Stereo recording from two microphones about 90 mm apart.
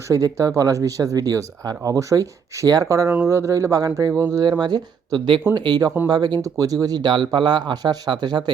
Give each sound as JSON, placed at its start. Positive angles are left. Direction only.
{"t": 0.1, "sound": "speech", "side_deg": -35}
{"t": 4.4, "sound": "speech", "side_deg": -50}